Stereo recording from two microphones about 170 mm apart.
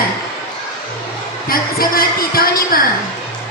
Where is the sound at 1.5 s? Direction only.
60° left (ahead or behind).